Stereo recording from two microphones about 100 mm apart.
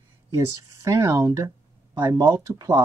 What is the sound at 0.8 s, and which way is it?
Speech, 30° right (ahead or behind).